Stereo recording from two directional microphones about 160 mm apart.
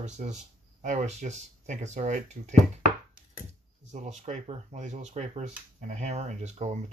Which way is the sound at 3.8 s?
50° right (ahead or behind).